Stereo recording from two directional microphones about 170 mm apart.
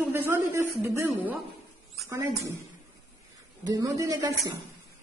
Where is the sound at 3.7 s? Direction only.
20° right (ahead or behind).